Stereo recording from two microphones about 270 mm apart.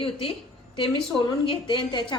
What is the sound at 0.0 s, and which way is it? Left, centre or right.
Speech, centre.